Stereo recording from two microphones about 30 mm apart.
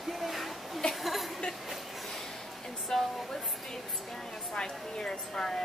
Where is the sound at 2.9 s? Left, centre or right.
Centre.